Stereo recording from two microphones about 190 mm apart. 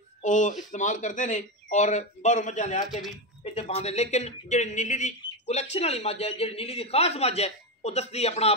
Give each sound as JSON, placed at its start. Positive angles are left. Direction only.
{"t": 0.2, "sound": "speech", "side_deg": 40}